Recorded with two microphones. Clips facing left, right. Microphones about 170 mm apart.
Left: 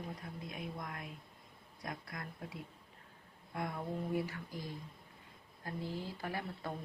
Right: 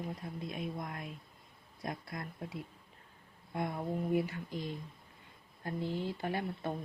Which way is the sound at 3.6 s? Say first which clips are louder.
Right 4 dB; 20° right (ahead or behind).